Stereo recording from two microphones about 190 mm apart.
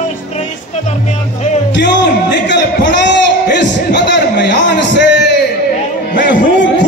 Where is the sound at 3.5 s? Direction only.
65° left (ahead or behind).